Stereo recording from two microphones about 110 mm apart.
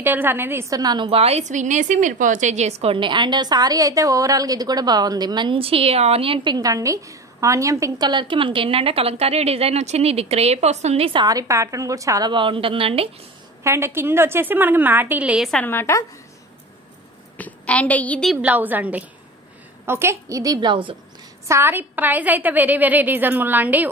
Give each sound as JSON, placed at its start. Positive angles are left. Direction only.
{"t": 0.0, "sound": "a woman's voice", "side_deg": -20}
{"t": 1.1, "sound": "a woman's voice", "side_deg": -75}
{"t": 8.1, "sound": "a woman's voice", "side_deg": -45}
{"t": 11.1, "sound": "a woman's voice", "side_deg": -35}
{"t": 12.3, "sound": "a woman's voice", "side_deg": -50}
{"t": 13.7, "sound": "a woman's voice", "side_deg": -25}
{"t": 15.5, "sound": "a woman's voice", "side_deg": 20}
{"t": 17.4, "sound": "a woman's voice", "side_deg": 10}
{"t": 18.4, "sound": "a woman's voice", "side_deg": -15}
{"t": 21.5, "sound": "a woman's voice", "side_deg": -20}